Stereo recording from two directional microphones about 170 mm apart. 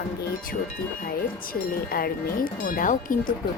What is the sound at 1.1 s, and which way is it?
Speech, 60° left (ahead or behind).